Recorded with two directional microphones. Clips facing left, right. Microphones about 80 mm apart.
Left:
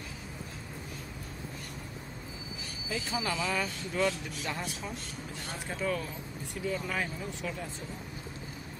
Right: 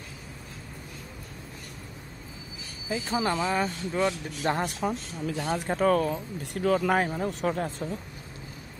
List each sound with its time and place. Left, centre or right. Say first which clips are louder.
3.1 s speech: right 6 dB; right
4.4 s speech: right 9 dB; right
5.2 s speech: right 16 dB; right
5.7 s speech: right 10 dB; right